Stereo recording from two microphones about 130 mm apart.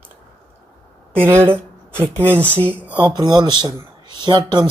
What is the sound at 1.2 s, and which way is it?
Speech, 15° right (ahead or behind).